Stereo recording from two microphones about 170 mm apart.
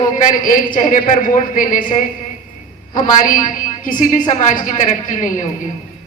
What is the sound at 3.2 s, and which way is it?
A woman's voice, 50° left (ahead or behind).